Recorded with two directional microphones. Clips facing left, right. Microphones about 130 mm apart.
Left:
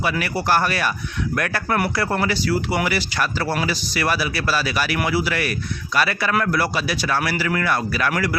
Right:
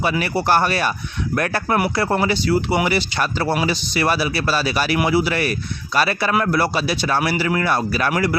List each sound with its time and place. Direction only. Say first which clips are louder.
0.0 s speech: right 3 dB; 25° right (ahead or behind)